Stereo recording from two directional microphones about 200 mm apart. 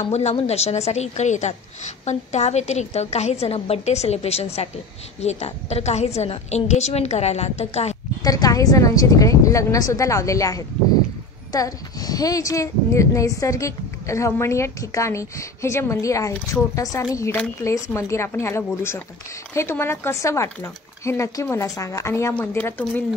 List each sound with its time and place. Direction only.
0.0 s a woman's voice: 30° left (ahead or behind)
8.2 s a woman's voice: 20° left (ahead or behind)